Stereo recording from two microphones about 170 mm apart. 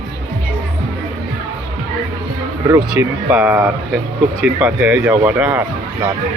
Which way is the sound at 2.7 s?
20° right (ahead or behind).